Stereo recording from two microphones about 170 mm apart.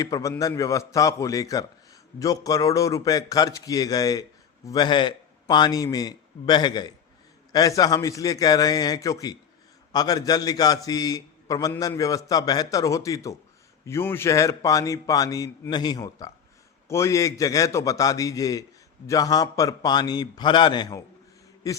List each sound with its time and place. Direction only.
0.0 s a man's voice: 20° left (ahead or behind)